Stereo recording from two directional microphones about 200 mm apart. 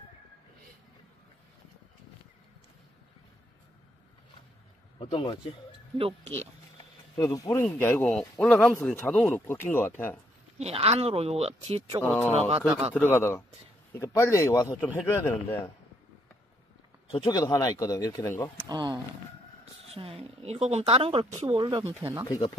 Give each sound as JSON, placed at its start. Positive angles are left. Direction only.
{"t": 4.9, "sound": "speech", "side_deg": 30}
{"t": 7.2, "sound": "speech", "side_deg": 20}
{"t": 10.6, "sound": "speech", "side_deg": -30}
{"t": 12.0, "sound": "speech", "side_deg": 5}
{"t": 12.4, "sound": "speech", "side_deg": -30}
{"t": 12.9, "sound": "speech", "side_deg": 10}
{"t": 17.1, "sound": "speech", "side_deg": 20}
{"t": 18.6, "sound": "a woman's voice", "side_deg": -20}
{"t": 21.6, "sound": "speech", "side_deg": -20}